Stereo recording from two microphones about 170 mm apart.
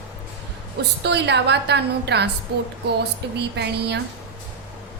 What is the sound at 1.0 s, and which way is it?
A woman's voice, 85° right.